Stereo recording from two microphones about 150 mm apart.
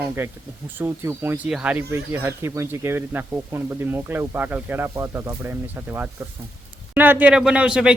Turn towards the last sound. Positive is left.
turn(degrees=-5)  # may be behind; listen again after turning